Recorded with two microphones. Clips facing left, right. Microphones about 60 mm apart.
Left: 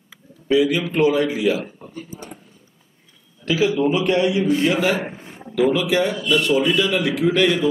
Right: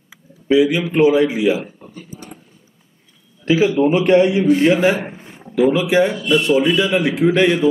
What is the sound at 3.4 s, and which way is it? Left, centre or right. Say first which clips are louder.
A man's voice: right 4 dB; right.